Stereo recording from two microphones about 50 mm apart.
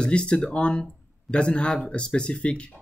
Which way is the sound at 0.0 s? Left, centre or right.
Centre.